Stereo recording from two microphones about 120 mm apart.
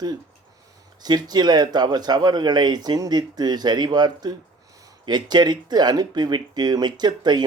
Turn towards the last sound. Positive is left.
turn(degrees=-35)  # may be behind; listen again after turning